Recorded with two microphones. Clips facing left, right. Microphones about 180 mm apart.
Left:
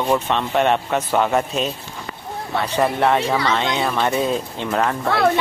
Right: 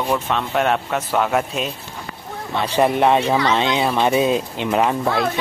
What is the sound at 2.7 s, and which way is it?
Speech, 20° right (ahead or behind).